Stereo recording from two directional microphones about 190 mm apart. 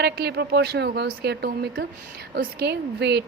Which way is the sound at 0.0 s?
60° right (ahead or behind).